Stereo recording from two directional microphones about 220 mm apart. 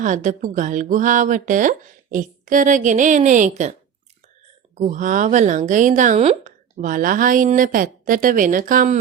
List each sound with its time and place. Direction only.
0.0 s a woman's voice: 35° right (ahead or behind)
4.8 s a woman's voice: 35° right (ahead or behind)